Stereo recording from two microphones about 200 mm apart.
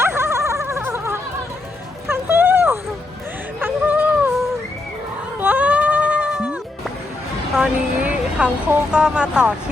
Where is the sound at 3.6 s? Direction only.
10° right (ahead or behind).